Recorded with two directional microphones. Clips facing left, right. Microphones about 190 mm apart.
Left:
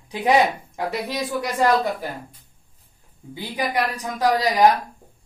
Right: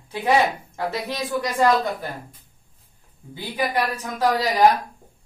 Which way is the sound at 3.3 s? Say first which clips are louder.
Even; 15° left (ahead or behind).